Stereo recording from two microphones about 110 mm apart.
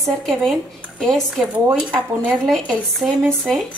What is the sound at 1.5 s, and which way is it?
Speech, 10° right (ahead or behind).